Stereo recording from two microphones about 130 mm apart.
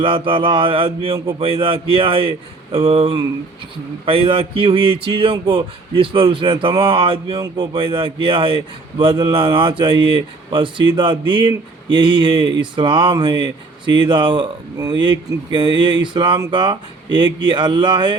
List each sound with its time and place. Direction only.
0.0 s a man's voice: 45° right (ahead or behind)
7.3 s a man's voice: 35° right (ahead or behind)